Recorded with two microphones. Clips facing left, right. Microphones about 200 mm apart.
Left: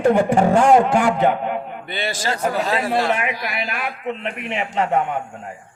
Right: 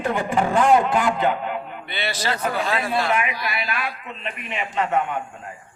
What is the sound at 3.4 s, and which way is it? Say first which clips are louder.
Speech: left 2 dB; 15° left (ahead or behind).